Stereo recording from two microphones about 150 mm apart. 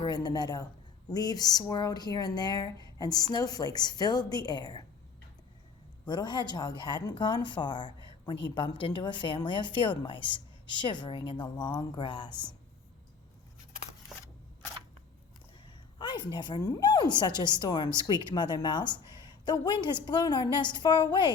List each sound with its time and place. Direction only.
0.0 s a woman's voice: 30° left (ahead or behind)
6.1 s speech: 30° left (ahead or behind)
14.1 s a sound: centre (ahead or behind)
16.0 s a woman's voice: 30° left (ahead or behind)